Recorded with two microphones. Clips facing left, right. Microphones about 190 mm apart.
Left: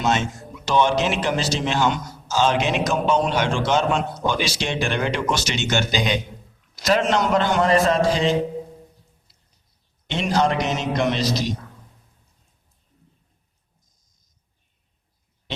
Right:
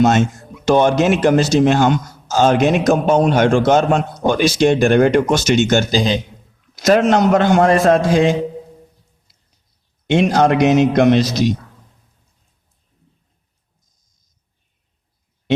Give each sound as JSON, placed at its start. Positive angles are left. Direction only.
{"t": 0.0, "sound": "a man's voice", "side_deg": -45}
{"t": 6.7, "sound": "a man's voice", "side_deg": -45}
{"t": 10.1, "sound": "a man's voice", "side_deg": -50}